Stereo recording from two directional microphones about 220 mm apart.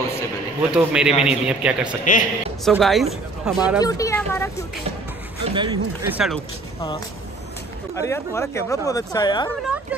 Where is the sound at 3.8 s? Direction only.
15° left (ahead or behind).